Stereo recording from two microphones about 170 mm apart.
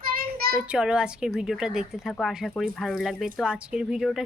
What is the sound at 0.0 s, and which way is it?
Child singing, 60° right (ahead or behind).